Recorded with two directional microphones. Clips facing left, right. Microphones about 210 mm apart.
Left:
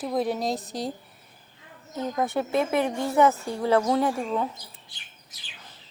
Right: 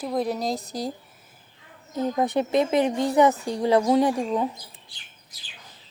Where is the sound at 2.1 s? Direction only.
20° right (ahead or behind).